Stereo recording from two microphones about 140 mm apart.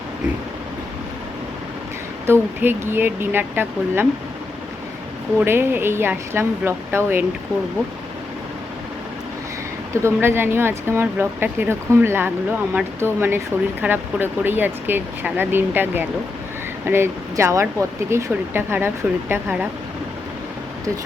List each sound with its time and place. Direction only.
2.2 s speech: 15° right (ahead or behind)
5.5 s speech: 15° right (ahead or behind)
9.9 s speech: 20° right (ahead or behind)